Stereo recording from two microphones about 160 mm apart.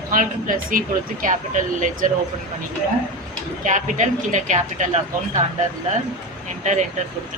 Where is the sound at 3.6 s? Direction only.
50° right (ahead or behind).